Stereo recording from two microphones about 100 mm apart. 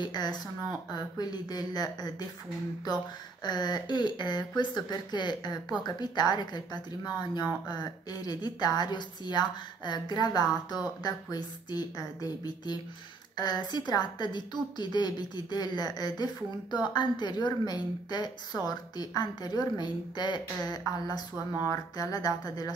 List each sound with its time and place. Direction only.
0.0 s speech: 45° left (ahead or behind)
3.4 s speech: 45° left (ahead or behind)